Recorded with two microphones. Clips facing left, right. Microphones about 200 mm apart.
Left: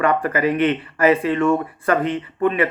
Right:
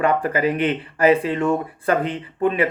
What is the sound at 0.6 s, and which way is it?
Speech, 30° right (ahead or behind).